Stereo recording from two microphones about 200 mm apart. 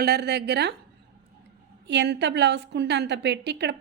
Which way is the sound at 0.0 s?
55° right (ahead or behind).